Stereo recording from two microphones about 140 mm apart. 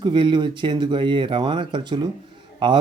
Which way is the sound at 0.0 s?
35° right (ahead or behind).